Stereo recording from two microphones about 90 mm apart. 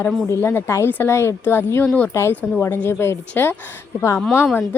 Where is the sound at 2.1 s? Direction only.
30° left (ahead or behind).